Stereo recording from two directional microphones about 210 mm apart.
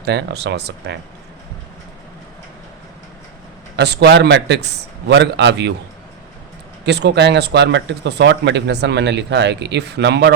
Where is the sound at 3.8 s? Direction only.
55° right (ahead or behind).